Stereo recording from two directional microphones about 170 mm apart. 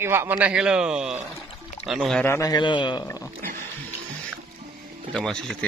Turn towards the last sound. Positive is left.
turn(degrees=5)  # may be behind; listen again after turning